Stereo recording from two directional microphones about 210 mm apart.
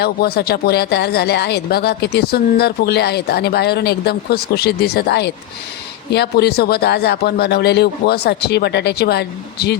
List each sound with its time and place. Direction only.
0.0 s speech: 50° left (ahead or behind)